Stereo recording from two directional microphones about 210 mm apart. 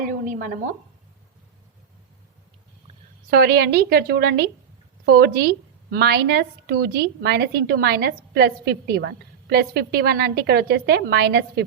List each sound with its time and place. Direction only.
0.0 s a woman's voice: 40° right (ahead or behind)
3.2 s a woman's voice: 50° right (ahead or behind)